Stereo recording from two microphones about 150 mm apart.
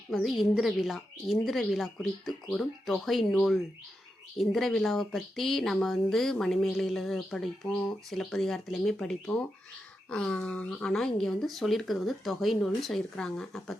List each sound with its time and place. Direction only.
0.1 s speech: centre (ahead or behind)